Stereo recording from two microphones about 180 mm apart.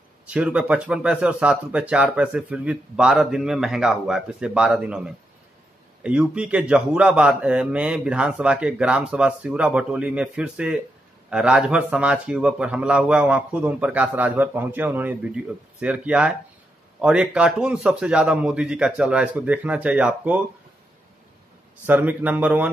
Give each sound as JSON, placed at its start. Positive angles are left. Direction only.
{"t": 0.3, "sound": "speech", "side_deg": -5}
{"t": 21.8, "sound": "speech", "side_deg": -10}